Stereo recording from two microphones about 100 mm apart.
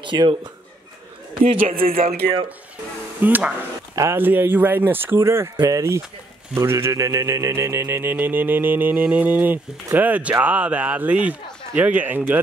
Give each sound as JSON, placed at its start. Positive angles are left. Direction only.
{"t": 0.0, "sound": "speech", "side_deg": -55}
{"t": 1.4, "sound": "a man's voice", "side_deg": -70}
{"t": 3.2, "sound": "a man's voice", "side_deg": -20}